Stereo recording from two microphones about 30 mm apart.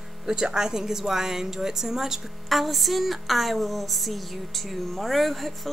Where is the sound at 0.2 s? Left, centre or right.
Right.